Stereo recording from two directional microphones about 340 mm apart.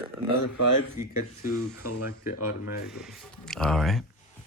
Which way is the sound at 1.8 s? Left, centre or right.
Left.